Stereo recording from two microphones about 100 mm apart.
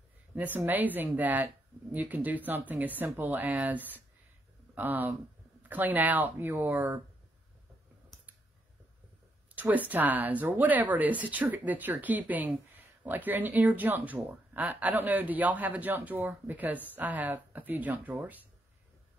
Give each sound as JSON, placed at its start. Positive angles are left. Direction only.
{"t": 0.3, "sound": "speech", "side_deg": -15}
{"t": 9.6, "sound": "speech", "side_deg": -15}